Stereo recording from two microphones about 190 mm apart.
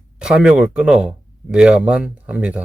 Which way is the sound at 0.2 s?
5° right (ahead or behind).